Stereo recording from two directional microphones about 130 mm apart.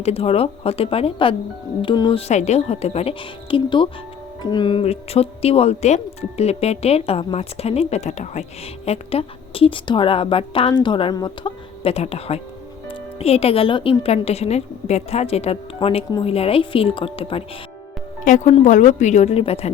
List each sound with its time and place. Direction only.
0.0 s speech: 50° left (ahead or behind)
18.6 s a woman's voice: 70° left (ahead or behind); by 19.7 s 50° left (ahead or behind)